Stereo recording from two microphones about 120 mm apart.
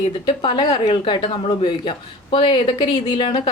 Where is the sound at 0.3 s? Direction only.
40° left (ahead or behind).